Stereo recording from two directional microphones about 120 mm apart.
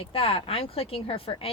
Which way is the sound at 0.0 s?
50° left (ahead or behind).